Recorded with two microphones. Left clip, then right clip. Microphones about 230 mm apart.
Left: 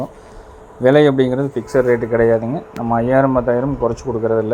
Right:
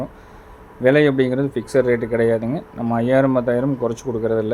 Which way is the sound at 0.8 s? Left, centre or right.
Centre.